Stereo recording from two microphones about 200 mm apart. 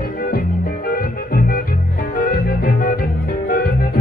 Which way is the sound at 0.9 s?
45° left (ahead or behind).